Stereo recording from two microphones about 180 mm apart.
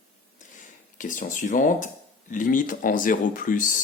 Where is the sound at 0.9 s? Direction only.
45° left (ahead or behind).